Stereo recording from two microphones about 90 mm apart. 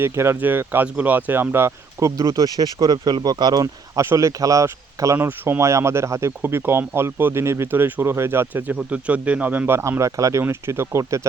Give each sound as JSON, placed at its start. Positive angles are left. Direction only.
{"t": 0.0, "sound": "speech", "side_deg": -30}
{"t": 8.7, "sound": "speech", "side_deg": -15}
{"t": 10.4, "sound": "speech", "side_deg": -30}